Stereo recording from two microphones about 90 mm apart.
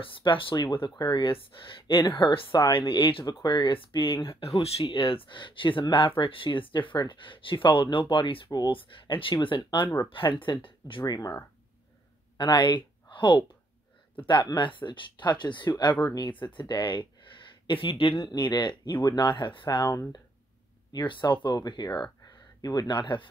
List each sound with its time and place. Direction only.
0.0 s speech: 65° left (ahead or behind)
4.6 s speech: 90° left; by 11.1 s 65° left (ahead or behind)
11.1 s speech: 45° left (ahead or behind)
12.4 s speech: 60° left (ahead or behind)
16.0 s speech: 45° left (ahead or behind)
16.3 s speech: 65° left (ahead or behind)
17.6 s speech: 80° left; by 19.9 s 60° left (ahead or behind)
20.9 s speech: 60° left (ahead or behind)